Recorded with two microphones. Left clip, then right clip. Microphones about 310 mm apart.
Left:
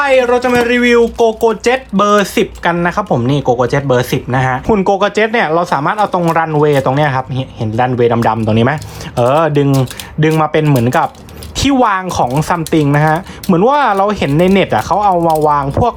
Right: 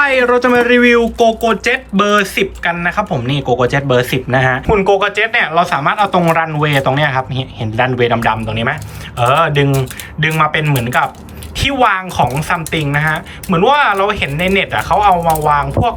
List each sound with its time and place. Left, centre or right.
0.0 s speech: centre
4.8 s a woman's voice: centre
15.8 s music: centre